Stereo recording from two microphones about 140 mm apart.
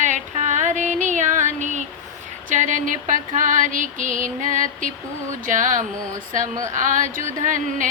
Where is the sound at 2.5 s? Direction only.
65° right (ahead or behind).